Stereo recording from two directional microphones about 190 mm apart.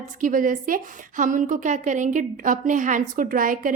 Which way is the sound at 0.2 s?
45° right (ahead or behind).